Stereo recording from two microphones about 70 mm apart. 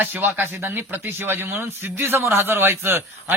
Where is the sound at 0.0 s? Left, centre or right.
Right.